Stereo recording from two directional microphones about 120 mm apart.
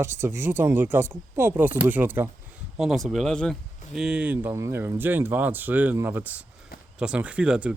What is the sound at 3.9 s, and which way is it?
Speech, 5° right (ahead or behind).